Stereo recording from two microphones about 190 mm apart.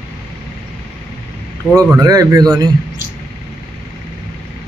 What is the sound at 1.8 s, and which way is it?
Speech, 20° right (ahead or behind).